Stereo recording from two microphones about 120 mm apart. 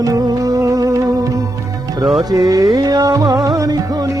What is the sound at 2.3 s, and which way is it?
Music, 30° right (ahead or behind).